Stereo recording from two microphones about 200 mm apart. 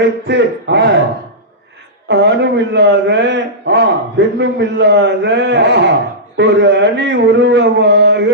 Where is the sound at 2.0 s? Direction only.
60° right (ahead or behind).